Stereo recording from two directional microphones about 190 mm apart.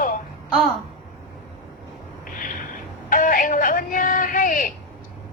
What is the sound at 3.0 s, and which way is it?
Speech, 45° left (ahead or behind).